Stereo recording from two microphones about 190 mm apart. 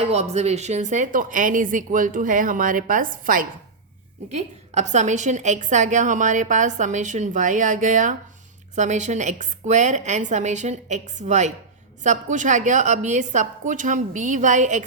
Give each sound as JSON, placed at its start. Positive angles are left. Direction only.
{"t": 0.1, "sound": "a woman's voice", "side_deg": -35}